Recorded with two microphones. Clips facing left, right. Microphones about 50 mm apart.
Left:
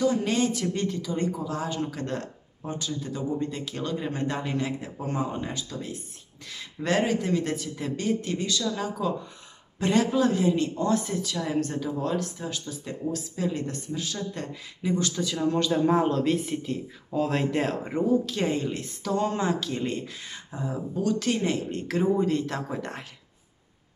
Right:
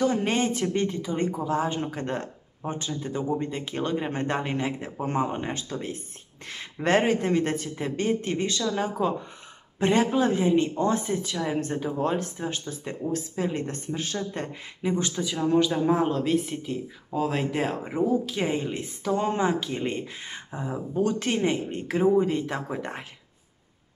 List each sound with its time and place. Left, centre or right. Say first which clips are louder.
0.0 s speech: even; right; by 23.0 s centre